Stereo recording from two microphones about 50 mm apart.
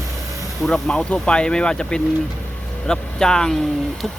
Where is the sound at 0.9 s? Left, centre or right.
Left.